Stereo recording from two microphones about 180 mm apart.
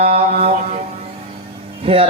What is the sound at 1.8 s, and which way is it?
Speech, 30° right (ahead or behind).